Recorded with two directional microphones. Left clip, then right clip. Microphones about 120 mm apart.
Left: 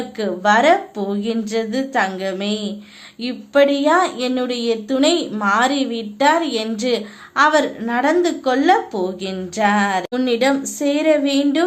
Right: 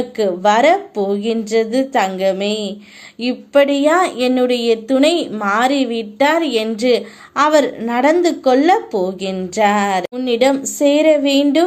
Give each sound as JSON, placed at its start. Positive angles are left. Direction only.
{"t": 0.2, "sound": "a woman's voice", "side_deg": -30}